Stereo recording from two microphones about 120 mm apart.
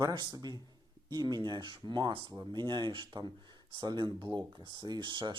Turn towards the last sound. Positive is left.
turn(degrees=-40)  # may be behind; listen again after turning